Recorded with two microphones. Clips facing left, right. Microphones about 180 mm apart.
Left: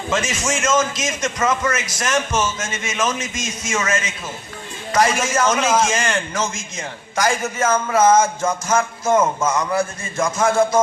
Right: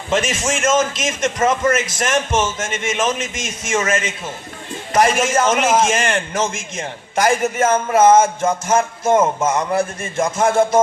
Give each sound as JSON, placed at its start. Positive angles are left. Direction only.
{"t": 0.6, "sound": "a man's voice", "side_deg": -25}